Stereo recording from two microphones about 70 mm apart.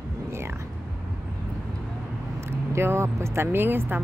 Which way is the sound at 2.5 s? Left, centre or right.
Right.